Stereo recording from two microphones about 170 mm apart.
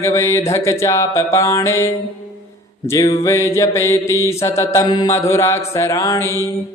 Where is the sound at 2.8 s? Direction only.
15° left (ahead or behind).